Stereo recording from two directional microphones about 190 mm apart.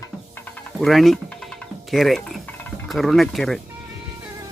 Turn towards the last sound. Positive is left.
turn(degrees=0)  # may be behind; listen again after turning